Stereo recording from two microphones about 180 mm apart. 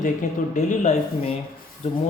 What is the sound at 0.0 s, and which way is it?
Speech, 45° left (ahead or behind).